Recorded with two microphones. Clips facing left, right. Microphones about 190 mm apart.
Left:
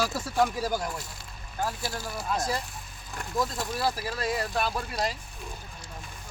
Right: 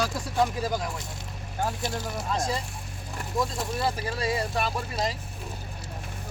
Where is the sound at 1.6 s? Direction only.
20° right (ahead or behind).